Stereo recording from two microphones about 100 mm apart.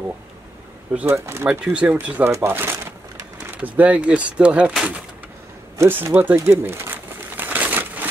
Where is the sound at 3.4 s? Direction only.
15° right (ahead or behind).